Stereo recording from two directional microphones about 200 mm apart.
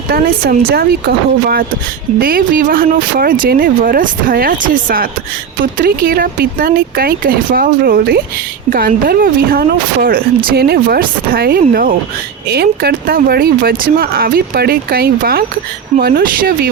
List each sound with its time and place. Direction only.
0.1 s speech: 50° right (ahead or behind)